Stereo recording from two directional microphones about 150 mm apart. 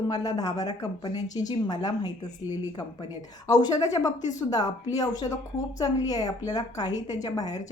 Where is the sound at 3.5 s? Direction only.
25° left (ahead or behind).